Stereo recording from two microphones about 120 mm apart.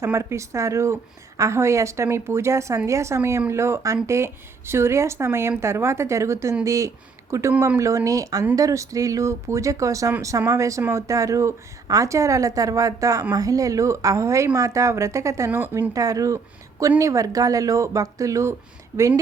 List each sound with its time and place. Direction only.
0.0 s speech: 25° right (ahead or behind)
15.9 s speech: 30° right (ahead or behind)